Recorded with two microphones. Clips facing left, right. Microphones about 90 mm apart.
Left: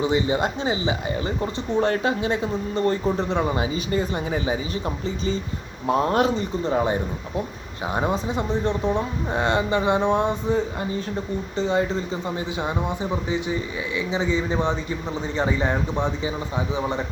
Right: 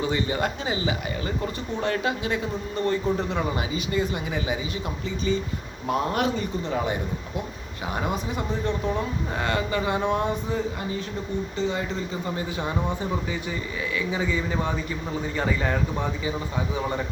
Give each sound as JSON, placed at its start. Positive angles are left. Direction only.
{"t": 0.0, "sound": "speech", "side_deg": 20}
{"t": 7.9, "sound": "speech", "side_deg": 25}
{"t": 12.5, "sound": "speech", "side_deg": 20}